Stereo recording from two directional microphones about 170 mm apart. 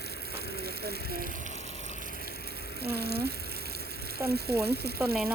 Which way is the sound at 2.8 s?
70° right (ahead or behind).